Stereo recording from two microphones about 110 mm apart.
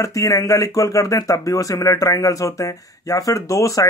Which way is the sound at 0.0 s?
30° left (ahead or behind).